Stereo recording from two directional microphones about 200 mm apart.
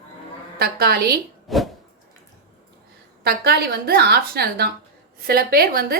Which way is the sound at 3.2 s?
50° right (ahead or behind).